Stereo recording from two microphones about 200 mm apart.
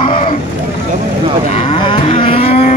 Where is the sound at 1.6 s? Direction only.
25° left (ahead or behind).